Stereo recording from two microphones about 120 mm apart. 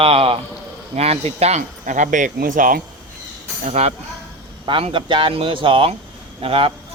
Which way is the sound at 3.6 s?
70° right (ahead or behind).